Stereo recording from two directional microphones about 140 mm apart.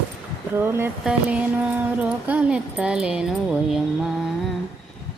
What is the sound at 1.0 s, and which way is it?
Music, 10° right (ahead or behind).